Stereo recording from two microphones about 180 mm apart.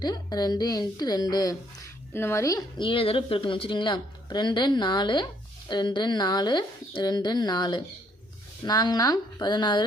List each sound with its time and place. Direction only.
0.0 s a woman's voice: 20° left (ahead or behind)